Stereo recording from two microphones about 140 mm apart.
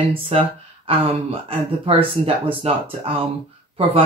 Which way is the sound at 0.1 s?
40° right (ahead or behind).